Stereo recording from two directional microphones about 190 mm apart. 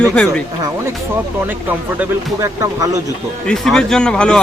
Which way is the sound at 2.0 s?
15° right (ahead or behind).